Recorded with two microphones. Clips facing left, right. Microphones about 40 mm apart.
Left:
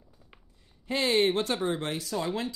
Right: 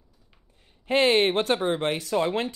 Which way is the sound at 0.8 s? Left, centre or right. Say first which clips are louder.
Right 5 dB; right.